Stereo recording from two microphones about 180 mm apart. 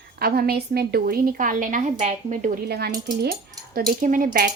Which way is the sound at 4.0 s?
45° right (ahead or behind).